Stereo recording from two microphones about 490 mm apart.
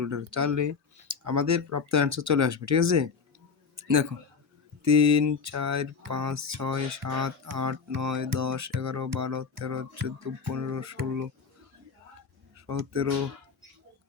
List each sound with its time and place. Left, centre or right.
0.0 s speech: right
12.5 s speech: right